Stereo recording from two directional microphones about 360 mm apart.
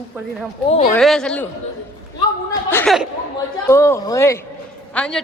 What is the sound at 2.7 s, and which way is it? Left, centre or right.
A woman's voice, centre.